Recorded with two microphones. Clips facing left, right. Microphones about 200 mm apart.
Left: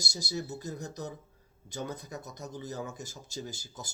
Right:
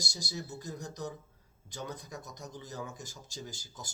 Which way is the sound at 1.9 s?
5° left (ahead or behind).